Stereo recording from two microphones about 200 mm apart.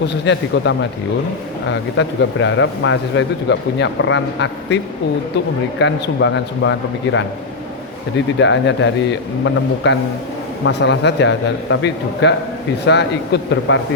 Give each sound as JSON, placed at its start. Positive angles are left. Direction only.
{"t": 0.3, "sound": "a man's voice", "side_deg": 65}
{"t": 5.8, "sound": "a man's voice", "side_deg": 65}